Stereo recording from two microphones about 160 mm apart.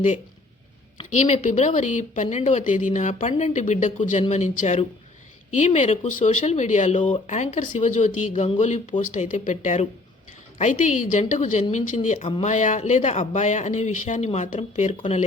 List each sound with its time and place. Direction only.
1.1 s speech: 45° left (ahead or behind)